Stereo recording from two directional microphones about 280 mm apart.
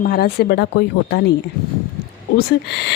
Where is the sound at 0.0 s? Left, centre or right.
Left.